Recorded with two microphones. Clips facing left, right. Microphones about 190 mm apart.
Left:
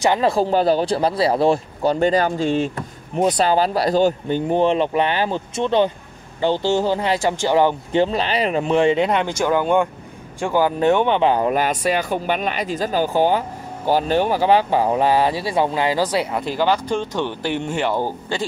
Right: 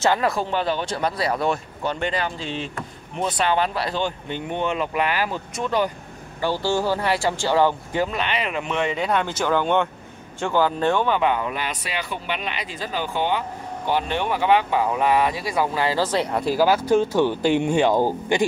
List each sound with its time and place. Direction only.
0.0 s speech: 20° left (ahead or behind)
0.3 s speech: 35° left (ahead or behind); by 18.4 s 15° right (ahead or behind)